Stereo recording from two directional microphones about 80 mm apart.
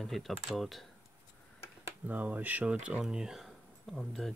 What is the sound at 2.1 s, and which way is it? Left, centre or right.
Speech, right.